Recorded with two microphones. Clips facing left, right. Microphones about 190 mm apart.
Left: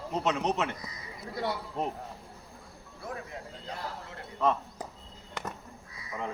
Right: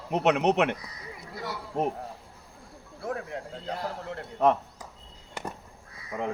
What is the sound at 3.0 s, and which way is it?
Speech, 60° right (ahead or behind).